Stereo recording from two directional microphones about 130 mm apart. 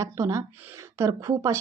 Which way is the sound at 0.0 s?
25° right (ahead or behind).